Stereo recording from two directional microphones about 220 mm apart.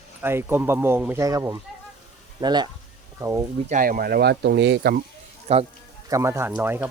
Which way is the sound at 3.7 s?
40° right (ahead or behind).